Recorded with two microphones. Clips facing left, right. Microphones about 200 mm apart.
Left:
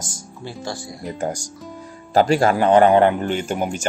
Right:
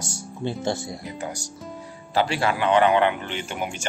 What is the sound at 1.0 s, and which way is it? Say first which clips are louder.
Speech: left 6 dB; 50° left (ahead or behind).